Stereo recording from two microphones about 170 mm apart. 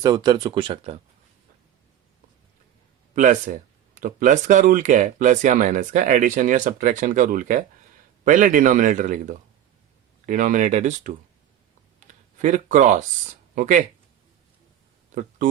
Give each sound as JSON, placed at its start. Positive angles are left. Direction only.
{"t": 0.0, "sound": "speech", "side_deg": -25}
{"t": 3.2, "sound": "speech", "side_deg": -50}
{"t": 12.4, "sound": "speech", "side_deg": -45}